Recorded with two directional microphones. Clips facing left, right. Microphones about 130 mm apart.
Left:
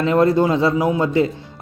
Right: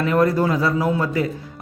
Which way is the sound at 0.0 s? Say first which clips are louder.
Left 3 dB; 25° left (ahead or behind).